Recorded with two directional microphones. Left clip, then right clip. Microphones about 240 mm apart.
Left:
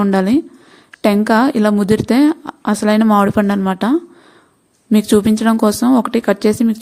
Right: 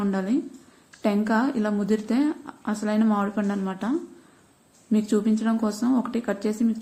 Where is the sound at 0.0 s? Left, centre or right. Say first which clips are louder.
Left 12 dB; left.